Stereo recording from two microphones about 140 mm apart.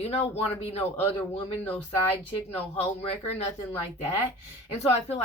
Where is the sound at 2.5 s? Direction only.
45° left (ahead or behind).